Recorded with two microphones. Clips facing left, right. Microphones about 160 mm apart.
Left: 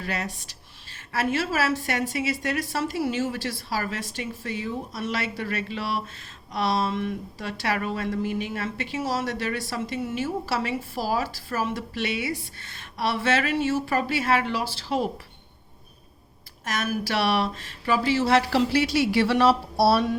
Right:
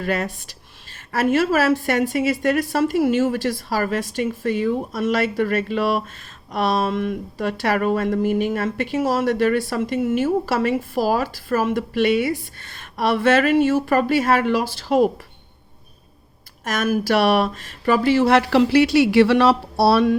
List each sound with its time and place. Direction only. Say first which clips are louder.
0.0 s speech: right 8 dB; 50° right (ahead or behind)
16.6 s speech: right 7 dB; 50° right (ahead or behind); by 20.1 s 70° right (ahead or behind)